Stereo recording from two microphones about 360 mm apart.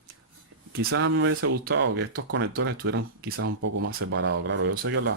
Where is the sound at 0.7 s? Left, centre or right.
Right.